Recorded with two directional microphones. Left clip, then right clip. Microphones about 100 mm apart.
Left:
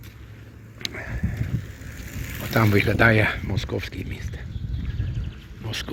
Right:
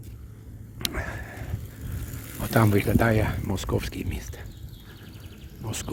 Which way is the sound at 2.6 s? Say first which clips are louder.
Left 5 dB; 5° right (ahead or behind).